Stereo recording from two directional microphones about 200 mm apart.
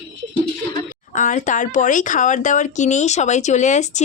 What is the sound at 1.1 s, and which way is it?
Speech, 40° left (ahead or behind).